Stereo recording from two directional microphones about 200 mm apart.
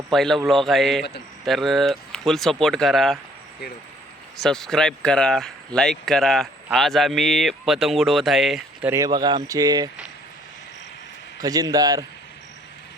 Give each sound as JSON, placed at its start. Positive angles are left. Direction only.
{"t": 0.1, "sound": "speech", "side_deg": 0}
{"t": 4.4, "sound": "speech", "side_deg": 0}
{"t": 11.3, "sound": "speech", "side_deg": -20}